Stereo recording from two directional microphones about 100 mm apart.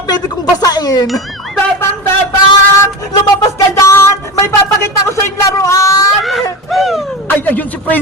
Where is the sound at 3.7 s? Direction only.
30° left (ahead or behind).